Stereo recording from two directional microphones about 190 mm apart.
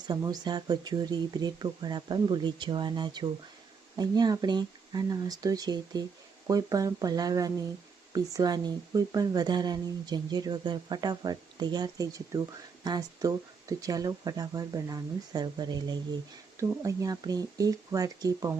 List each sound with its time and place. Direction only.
0.1 s speech: 20° right (ahead or behind)